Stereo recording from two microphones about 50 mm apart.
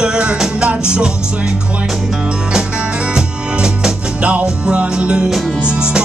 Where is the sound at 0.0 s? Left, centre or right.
Centre.